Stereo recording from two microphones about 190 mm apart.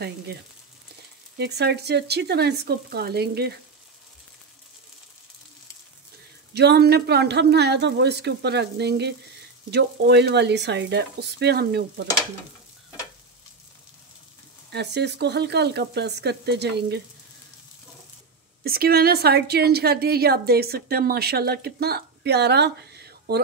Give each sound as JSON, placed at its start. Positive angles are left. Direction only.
{"t": 1.4, "sound": "a woman's voice", "side_deg": -60}
{"t": 6.5, "sound": "a woman's voice", "side_deg": -60}
{"t": 14.7, "sound": "a woman's voice", "side_deg": -65}
{"t": 18.6, "sound": "a woman's voice", "side_deg": -55}